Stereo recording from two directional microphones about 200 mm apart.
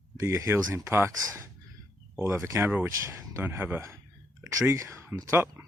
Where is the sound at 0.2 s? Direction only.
15° right (ahead or behind).